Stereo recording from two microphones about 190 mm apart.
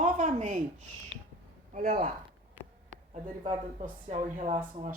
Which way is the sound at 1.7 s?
45° right (ahead or behind).